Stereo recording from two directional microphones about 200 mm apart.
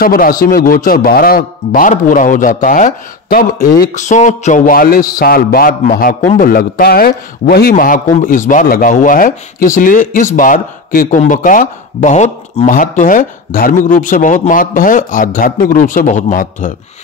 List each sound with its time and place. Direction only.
0.0 s a man's voice: 45° left (ahead or behind)